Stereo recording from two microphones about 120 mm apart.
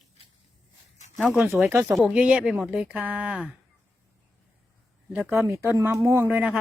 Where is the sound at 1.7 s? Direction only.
15° right (ahead or behind).